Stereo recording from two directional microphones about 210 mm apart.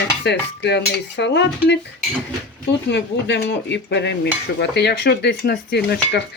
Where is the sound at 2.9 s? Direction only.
55° left (ahead or behind).